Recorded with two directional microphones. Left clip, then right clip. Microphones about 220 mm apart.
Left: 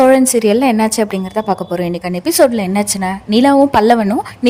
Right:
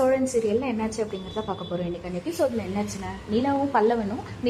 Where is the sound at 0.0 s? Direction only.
55° left (ahead or behind).